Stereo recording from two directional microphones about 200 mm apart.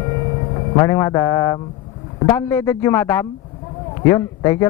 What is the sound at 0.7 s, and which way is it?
Speech, 15° left (ahead or behind).